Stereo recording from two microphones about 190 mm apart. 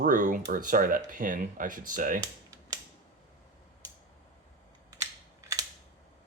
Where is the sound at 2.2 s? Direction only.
20° right (ahead or behind).